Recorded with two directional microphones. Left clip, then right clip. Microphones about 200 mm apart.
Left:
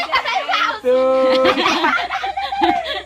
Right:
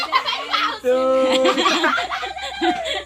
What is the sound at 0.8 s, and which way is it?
Speech, 15° left (ahead or behind).